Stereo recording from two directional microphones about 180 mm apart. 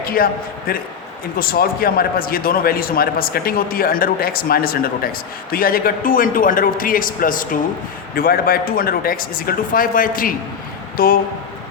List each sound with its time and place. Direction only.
0.0 s a man's voice: 55° left (ahead or behind)